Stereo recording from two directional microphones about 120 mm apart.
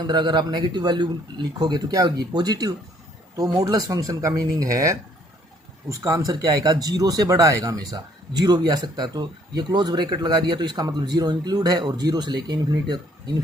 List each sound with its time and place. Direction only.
0.1 s speech: 40° right (ahead or behind)